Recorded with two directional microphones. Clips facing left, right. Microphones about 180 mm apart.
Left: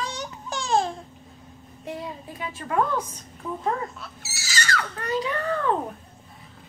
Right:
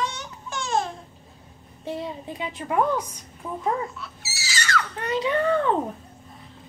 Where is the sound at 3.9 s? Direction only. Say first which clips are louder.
Right 2 dB; 50° left (ahead or behind).